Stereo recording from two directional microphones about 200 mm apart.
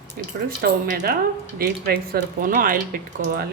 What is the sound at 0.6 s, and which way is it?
Speech, 50° right (ahead or behind).